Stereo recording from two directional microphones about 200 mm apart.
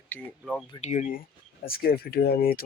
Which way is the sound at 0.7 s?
35° left (ahead or behind).